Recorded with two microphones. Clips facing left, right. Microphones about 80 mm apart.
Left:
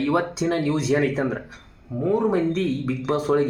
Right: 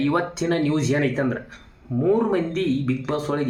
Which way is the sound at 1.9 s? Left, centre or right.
Centre.